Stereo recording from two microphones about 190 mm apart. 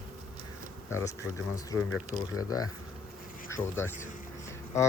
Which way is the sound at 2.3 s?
20° left (ahead or behind).